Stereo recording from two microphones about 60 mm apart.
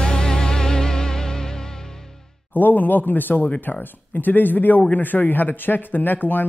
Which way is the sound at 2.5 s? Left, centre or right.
Left.